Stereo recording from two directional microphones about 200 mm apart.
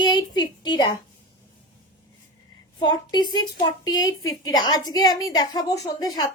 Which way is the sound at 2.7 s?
20° left (ahead or behind).